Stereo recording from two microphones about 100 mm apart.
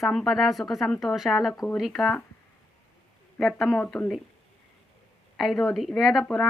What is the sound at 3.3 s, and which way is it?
Speech, 5° left (ahead or behind).